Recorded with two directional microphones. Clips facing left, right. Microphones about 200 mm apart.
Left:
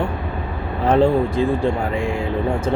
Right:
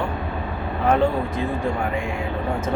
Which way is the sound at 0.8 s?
30° left (ahead or behind).